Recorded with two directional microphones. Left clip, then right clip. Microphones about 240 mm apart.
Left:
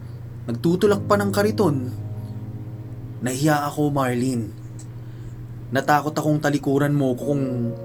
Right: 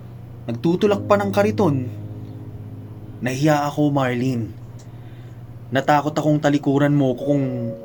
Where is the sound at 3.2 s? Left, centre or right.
Right.